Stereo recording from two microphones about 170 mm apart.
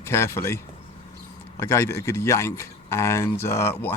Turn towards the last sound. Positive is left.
turn(degrees=15)  # may be behind; listen again after turning